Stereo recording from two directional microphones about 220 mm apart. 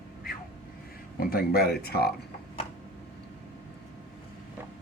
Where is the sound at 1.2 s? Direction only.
45° left (ahead or behind).